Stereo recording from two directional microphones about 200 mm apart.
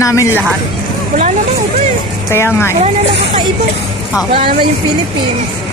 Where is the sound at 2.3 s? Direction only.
10° left (ahead or behind).